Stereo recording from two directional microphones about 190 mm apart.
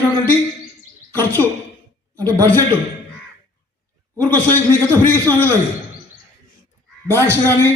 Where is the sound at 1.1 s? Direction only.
10° left (ahead or behind).